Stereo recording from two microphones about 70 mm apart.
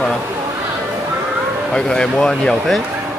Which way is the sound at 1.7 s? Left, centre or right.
Centre.